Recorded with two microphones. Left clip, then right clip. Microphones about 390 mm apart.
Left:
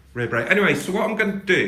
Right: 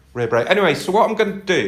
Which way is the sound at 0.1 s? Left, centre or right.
Centre.